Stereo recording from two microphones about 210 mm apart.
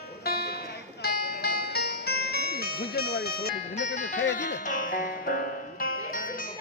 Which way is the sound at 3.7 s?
35° left (ahead or behind).